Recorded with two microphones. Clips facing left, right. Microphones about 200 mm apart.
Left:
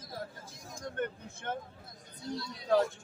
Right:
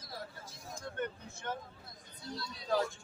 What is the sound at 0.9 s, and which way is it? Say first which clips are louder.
Vehicle: left 3 dB; 55° left (ahead or behind).